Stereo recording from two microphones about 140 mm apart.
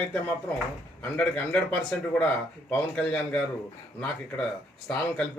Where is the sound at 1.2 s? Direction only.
10° left (ahead or behind).